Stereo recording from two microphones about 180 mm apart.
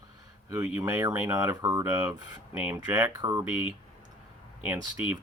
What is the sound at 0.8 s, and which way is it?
Speech, 15° right (ahead or behind).